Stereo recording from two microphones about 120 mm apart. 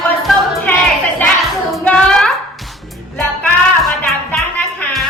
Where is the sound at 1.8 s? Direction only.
5° left (ahead or behind).